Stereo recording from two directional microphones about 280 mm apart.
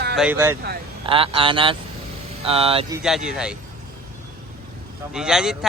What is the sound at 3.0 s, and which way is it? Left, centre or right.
Speech, centre.